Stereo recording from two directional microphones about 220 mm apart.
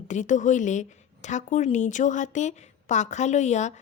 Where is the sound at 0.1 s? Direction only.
35° left (ahead or behind).